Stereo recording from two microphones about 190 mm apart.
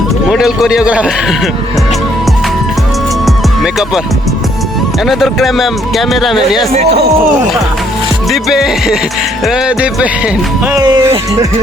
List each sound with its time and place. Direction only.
0.3 s speech: centre (ahead or behind)
3.2 s music: centre (ahead or behind)
5.0 s speech: centre (ahead or behind)
8.3 s music: centre (ahead or behind)
9.4 s speech: 5° right (ahead or behind)
10.8 s speech: 20° right (ahead or behind)